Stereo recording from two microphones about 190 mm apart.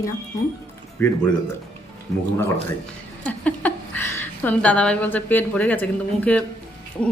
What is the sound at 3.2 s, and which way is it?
A woman's voice, 10° left (ahead or behind).